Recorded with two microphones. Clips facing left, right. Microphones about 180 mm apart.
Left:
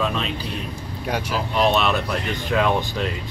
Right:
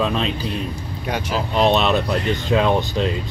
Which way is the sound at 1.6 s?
30° right (ahead or behind).